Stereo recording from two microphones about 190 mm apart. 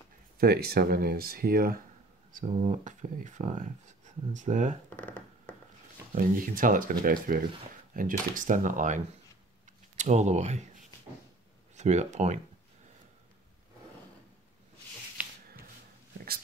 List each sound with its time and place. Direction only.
0.4 s speech: 55° right (ahead or behind)
2.5 s speech: 35° right (ahead or behind)
4.8 s a sound: 10° left (ahead or behind)
6.1 s speech: 45° right (ahead or behind)
11.7 s speech: 40° right (ahead or behind)